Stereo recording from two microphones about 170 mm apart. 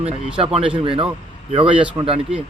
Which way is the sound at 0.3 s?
35° right (ahead or behind).